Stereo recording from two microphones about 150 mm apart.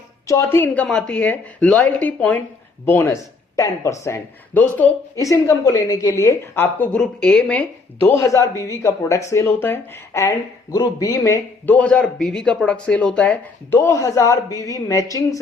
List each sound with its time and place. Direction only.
0.3 s a woman's voice: 20° left (ahead or behind)